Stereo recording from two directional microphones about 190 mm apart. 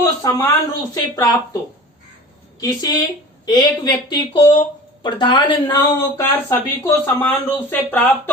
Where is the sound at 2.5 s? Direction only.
20° left (ahead or behind).